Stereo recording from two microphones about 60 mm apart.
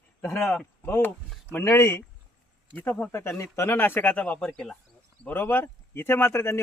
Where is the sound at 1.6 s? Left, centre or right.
Left.